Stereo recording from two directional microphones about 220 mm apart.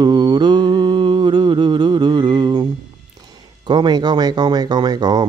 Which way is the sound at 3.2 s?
20° right (ahead or behind).